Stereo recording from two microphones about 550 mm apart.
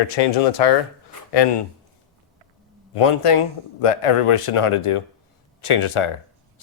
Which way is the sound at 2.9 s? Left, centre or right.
Left.